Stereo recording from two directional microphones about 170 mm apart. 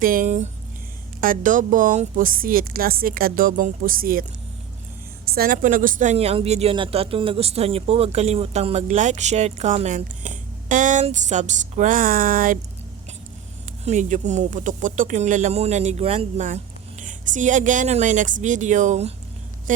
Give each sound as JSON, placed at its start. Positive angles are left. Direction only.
{"t": 0.0, "sound": "a woman's voice", "side_deg": -55}
{"t": 5.3, "sound": "speech", "side_deg": -55}
{"t": 13.8, "sound": "speech", "side_deg": -45}